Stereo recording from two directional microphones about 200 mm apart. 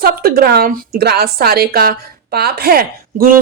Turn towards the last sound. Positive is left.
turn(degrees=-50)  # may be behind; listen again after turning